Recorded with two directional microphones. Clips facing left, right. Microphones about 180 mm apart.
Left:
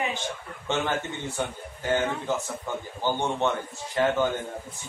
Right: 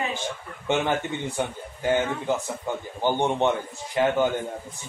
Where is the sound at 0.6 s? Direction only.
15° right (ahead or behind).